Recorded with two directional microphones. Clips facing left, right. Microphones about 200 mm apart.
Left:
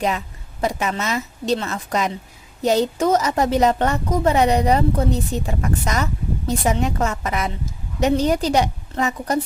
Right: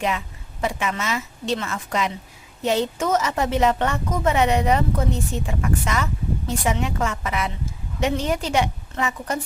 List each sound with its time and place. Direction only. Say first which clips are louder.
0.6 s a woman's voice: left 3 dB; 40° left (ahead or behind)